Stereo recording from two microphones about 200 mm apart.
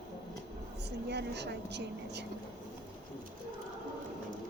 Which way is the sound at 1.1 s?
55° right (ahead or behind).